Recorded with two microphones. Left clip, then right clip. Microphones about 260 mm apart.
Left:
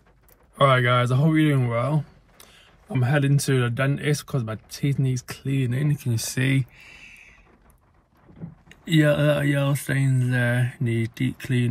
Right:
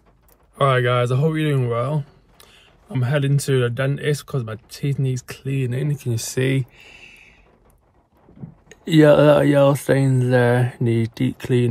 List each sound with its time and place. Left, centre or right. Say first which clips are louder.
0.6 s speech: right 1 dB; centre
8.6 s speech: right 8 dB; right